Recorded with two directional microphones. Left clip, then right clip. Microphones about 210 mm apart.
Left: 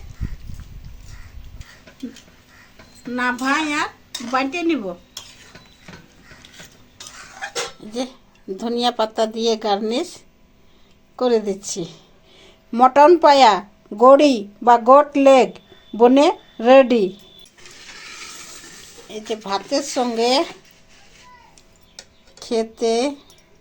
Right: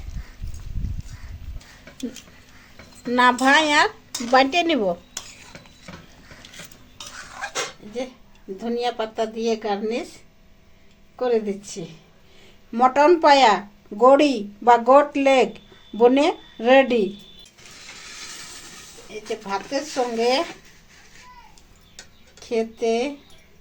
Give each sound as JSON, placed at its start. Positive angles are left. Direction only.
{"t": 3.1, "sound": "speech", "side_deg": -35}
{"t": 8.5, "sound": "speech", "side_deg": 35}
{"t": 11.2, "sound": "speech", "side_deg": 35}
{"t": 12.4, "sound": "speech", "side_deg": 20}
{"t": 19.1, "sound": "speech", "side_deg": 40}
{"t": 22.4, "sound": "speech", "side_deg": 30}